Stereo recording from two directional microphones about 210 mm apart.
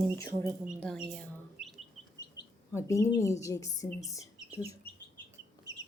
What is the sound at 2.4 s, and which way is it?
Chirp, 20° left (ahead or behind).